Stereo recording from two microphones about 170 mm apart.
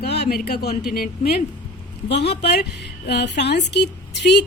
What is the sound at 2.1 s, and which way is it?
A woman's voice, 80° left.